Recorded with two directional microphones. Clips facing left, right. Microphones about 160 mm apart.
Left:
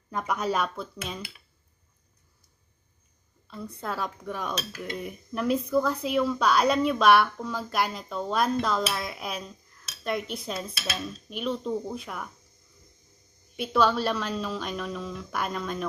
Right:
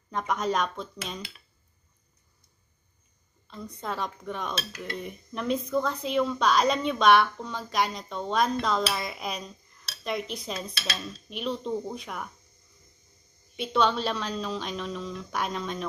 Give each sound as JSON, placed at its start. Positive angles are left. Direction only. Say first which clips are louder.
{"t": 0.1, "sound": "cutlery", "louder": "even", "side_deg": 5}
{"t": 3.4, "sound": "cutlery", "louder": "left 1 dB", "side_deg": 5}
{"t": 13.6, "sound": "cutlery", "louder": "left 1 dB", "side_deg": 5}